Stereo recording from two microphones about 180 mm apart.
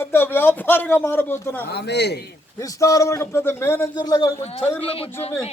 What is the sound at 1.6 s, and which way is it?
Speech, 65° left (ahead or behind).